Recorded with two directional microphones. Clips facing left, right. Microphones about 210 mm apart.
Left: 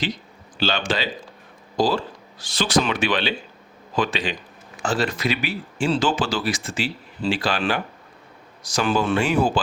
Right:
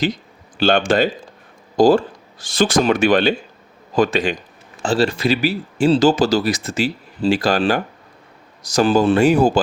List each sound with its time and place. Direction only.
0.5 s speech: 50° right (ahead or behind)
4.8 s speech: 30° right (ahead or behind)